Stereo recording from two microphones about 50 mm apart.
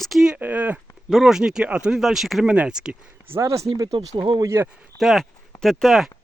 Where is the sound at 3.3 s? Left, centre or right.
Right.